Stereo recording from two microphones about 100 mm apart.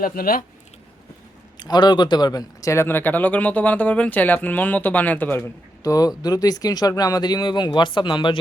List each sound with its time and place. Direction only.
1.5 s a man's voice: 45° left (ahead or behind)
2.8 s speech: 20° left (ahead or behind)
5.8 s speech: 35° left (ahead or behind)